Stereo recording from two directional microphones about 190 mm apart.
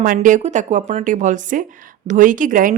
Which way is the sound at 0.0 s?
45° right (ahead or behind).